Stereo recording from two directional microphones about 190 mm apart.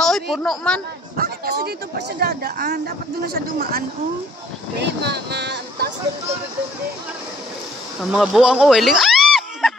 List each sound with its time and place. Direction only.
0.0 s speech: centre (ahead or behind)
1.1 s speech: 50° right (ahead or behind)
4.7 s speech: 60° right (ahead or behind)
8.0 s speech: centre (ahead or behind)